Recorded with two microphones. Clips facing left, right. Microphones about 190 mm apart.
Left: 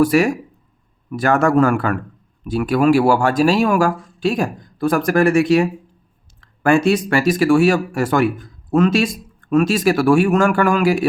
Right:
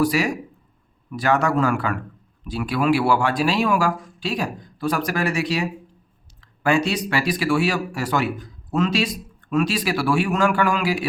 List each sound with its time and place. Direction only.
0.0 s speech: 50° left (ahead or behind)